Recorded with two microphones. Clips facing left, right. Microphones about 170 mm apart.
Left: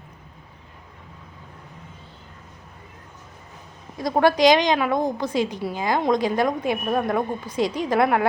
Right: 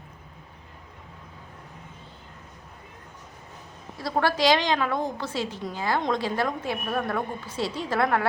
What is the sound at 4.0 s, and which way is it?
A woman's voice, 15° left (ahead or behind).